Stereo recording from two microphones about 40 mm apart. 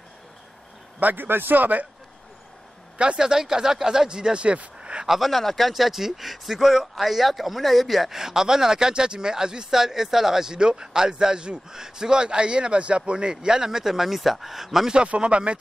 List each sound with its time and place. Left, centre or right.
1.1 s speech: right
3.0 s speech: right
5.0 s a man's voice: centre
5.3 s a man's voice: centre
15.0 s speech: right